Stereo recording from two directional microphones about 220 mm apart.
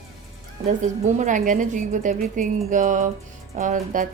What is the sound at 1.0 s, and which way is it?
A woman's voice, 35° right (ahead or behind).